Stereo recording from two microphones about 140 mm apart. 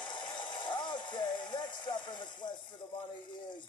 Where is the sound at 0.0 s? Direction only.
35° left (ahead or behind).